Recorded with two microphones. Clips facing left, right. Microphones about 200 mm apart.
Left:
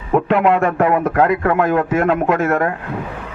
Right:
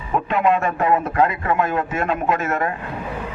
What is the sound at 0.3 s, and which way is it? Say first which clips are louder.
A man's voice: left 2 dB; 75° left (ahead or behind).